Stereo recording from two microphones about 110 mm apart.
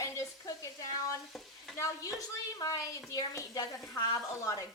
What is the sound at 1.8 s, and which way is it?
A woman's voice, 30° left (ahead or behind).